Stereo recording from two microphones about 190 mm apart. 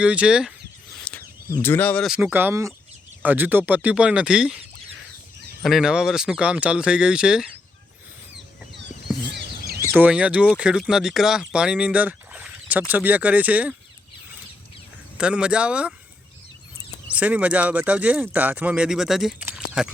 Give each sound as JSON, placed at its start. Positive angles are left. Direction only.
{"t": 0.0, "sound": "speech", "side_deg": -5}
{"t": 1.1, "sound": "a sound", "side_deg": 5}
{"t": 1.5, "sound": "speech", "side_deg": 15}
{"t": 5.6, "sound": "speech", "side_deg": 0}
{"t": 9.2, "sound": "a sound", "side_deg": -65}
{"t": 9.9, "sound": "speech", "side_deg": -5}
{"t": 15.2, "sound": "speech", "side_deg": -5}
{"t": 17.1, "sound": "speech", "side_deg": -5}